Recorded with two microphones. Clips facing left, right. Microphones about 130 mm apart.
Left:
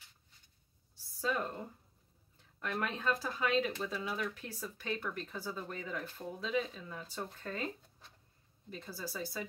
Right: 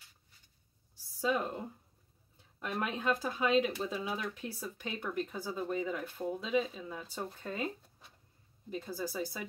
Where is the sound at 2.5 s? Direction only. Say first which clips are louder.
Right 1 dB; 15° right (ahead or behind).